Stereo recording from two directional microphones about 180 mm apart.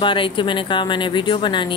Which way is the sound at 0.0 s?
30° left (ahead or behind).